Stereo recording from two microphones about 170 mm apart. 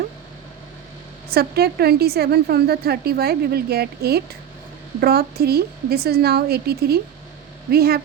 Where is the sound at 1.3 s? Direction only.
70° right (ahead or behind).